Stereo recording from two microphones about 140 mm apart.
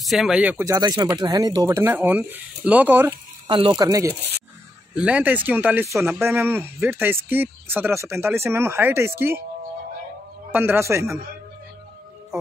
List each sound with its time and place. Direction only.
0.0 s speech: centre (ahead or behind)
0.7 s speech: 25° right (ahead or behind)
3.4 s speech: 35° right (ahead or behind)
4.9 s speech: 10° right (ahead or behind)
10.5 s speech: 15° right (ahead or behind)